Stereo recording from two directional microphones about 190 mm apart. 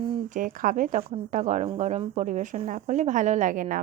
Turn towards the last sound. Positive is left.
turn(degrees=-45)  # may be behind; listen again after turning